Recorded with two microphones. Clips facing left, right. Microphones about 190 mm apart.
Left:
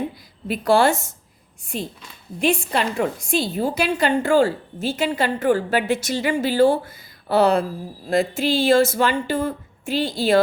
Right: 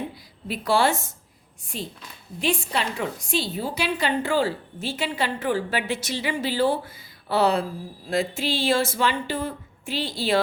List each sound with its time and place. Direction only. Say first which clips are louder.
0.4 s a woman's voice: left 5 dB; 50° left (ahead or behind)
2.4 s a woman's voice: left 5 dB; 50° left (ahead or behind)